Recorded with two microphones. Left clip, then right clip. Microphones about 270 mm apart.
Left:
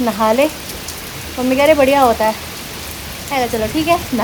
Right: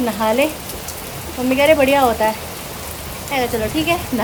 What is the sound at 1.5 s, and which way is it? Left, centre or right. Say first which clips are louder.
Speech: left 2 dB; centre.